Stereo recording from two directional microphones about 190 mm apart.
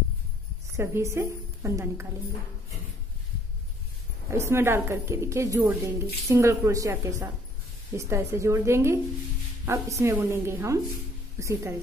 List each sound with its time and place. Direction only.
0.7 s a woman's voice: 15° right (ahead or behind)
4.3 s a woman's voice: 15° right (ahead or behind)